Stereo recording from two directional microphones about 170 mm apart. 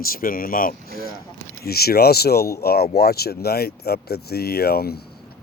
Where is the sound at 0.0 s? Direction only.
55° left (ahead or behind).